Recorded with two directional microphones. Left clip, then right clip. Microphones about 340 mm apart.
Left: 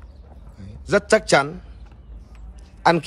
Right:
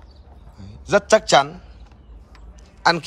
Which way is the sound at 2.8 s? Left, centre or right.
Centre.